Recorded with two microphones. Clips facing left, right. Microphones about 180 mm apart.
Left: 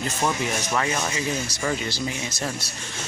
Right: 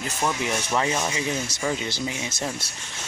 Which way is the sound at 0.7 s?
20° right (ahead or behind).